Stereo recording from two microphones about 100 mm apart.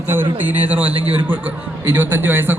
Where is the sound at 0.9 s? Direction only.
75° right (ahead or behind).